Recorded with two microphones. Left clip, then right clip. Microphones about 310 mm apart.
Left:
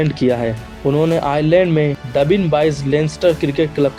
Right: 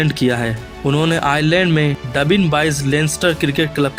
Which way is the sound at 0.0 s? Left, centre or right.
Right.